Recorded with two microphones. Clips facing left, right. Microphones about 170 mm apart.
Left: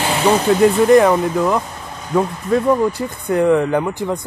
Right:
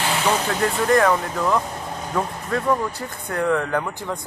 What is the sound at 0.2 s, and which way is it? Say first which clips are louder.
Speech: left 11 dB; 20° left (ahead or behind).